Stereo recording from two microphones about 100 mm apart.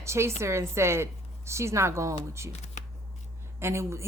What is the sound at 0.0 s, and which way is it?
A woman's voice, 25° right (ahead or behind).